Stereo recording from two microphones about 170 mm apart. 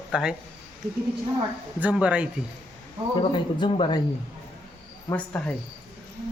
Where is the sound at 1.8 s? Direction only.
10° right (ahead or behind).